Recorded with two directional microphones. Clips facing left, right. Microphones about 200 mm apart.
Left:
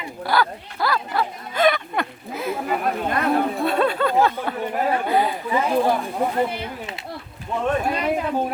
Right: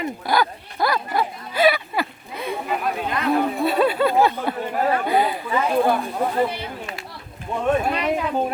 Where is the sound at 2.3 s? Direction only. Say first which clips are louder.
Left 2 dB; centre (ahead or behind).